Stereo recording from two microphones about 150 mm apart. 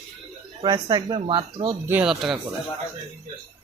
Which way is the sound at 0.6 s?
30° right (ahead or behind).